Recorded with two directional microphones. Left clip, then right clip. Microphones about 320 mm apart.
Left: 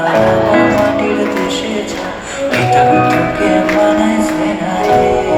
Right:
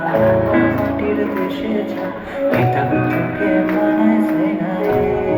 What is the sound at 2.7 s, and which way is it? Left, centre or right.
Music, left.